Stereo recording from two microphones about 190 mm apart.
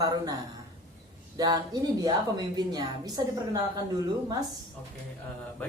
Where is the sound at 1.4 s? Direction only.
20° right (ahead or behind).